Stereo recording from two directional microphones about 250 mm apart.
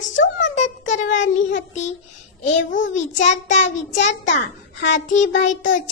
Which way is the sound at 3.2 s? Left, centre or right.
Left.